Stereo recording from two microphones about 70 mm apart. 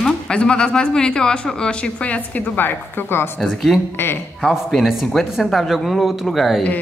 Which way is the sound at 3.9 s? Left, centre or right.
Left.